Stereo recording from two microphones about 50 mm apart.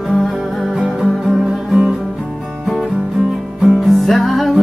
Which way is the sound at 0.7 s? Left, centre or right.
Centre.